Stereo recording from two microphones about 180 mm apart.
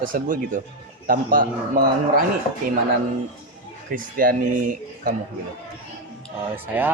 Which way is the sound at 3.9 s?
50° right (ahead or behind).